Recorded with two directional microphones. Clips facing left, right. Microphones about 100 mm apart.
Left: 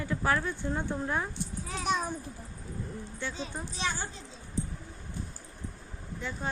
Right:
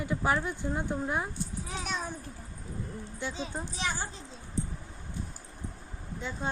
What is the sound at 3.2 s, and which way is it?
Speech, 20° right (ahead or behind).